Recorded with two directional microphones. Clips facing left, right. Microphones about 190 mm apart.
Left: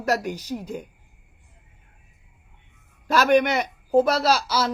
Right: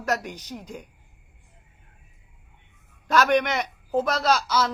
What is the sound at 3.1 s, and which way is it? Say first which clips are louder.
A woman's voice: left 2 dB; 10° left (ahead or behind).